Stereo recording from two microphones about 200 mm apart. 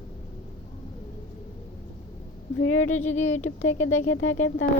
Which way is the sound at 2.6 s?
90° left.